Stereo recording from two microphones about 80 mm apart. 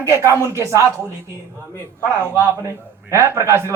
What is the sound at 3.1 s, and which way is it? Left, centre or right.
Speech, right.